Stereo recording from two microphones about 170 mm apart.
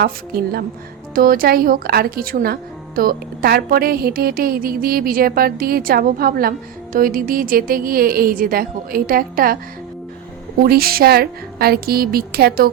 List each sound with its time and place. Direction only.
0.0 s speech: 65° right (ahead or behind)
10.6 s speech: 60° right (ahead or behind)